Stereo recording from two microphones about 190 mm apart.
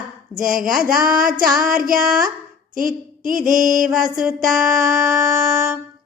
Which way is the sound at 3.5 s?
45° right (ahead or behind).